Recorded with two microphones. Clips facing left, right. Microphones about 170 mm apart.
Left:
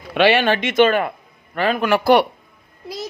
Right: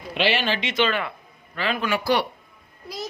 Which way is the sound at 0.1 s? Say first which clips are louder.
Left 8 dB; 60° left (ahead or behind).